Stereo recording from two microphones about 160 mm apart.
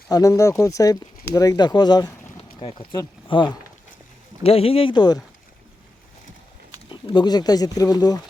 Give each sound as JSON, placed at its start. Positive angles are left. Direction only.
{"t": 0.1, "sound": "speech", "side_deg": 20}
{"t": 6.9, "sound": "speech", "side_deg": 30}